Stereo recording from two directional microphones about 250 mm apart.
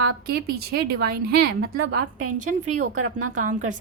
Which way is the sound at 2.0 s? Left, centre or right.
Right.